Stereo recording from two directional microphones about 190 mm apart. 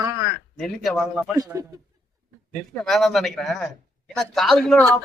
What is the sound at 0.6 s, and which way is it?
Speech, centre (ahead or behind).